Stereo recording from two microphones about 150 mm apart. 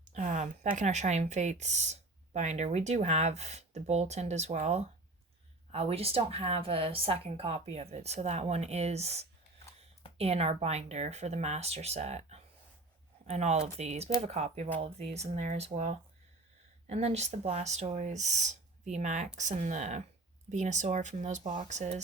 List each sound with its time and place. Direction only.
0.1 s speech: 55° right (ahead or behind)